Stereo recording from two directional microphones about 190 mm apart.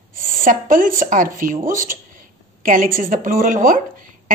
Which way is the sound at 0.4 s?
45° right (ahead or behind).